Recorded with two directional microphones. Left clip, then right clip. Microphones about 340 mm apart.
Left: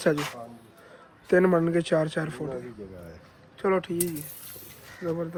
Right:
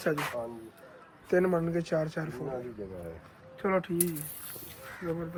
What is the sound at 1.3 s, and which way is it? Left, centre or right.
A woman's voice, left.